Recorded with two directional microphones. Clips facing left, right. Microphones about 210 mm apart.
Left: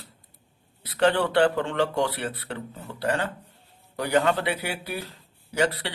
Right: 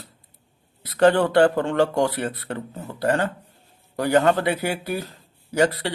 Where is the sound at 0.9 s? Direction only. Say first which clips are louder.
Right 5 dB; 45° right (ahead or behind).